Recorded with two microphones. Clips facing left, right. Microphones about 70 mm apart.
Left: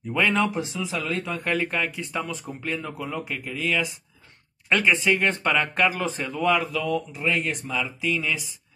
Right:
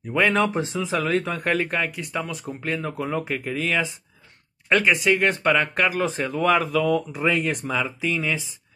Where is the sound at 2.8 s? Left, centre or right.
Right.